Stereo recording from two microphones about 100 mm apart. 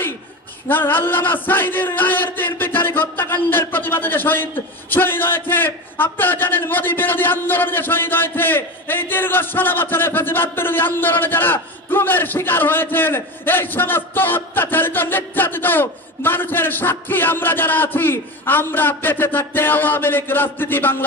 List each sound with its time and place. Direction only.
0.7 s a man's voice: 20° left (ahead or behind)